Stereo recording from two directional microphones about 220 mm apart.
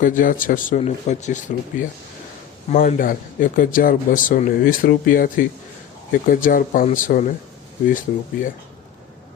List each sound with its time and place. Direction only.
0.0 s speech: 35° left (ahead or behind)